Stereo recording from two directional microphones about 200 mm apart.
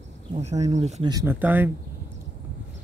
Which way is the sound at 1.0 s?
15° right (ahead or behind).